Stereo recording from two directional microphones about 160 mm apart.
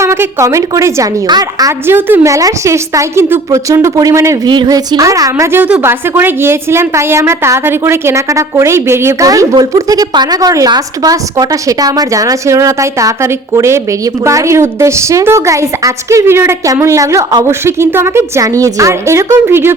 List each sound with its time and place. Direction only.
0.0 s a woman's voice: 15° right (ahead or behind)